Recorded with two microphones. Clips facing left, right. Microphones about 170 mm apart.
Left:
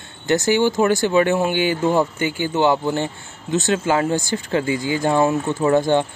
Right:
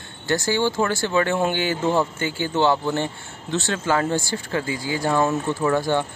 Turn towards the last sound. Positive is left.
turn(degrees=20)  # may be behind; listen again after turning